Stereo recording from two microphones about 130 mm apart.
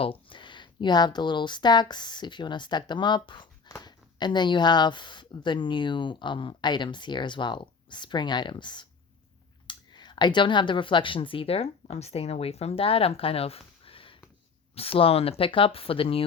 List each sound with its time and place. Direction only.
0.0 s speech: 45° left (ahead or behind)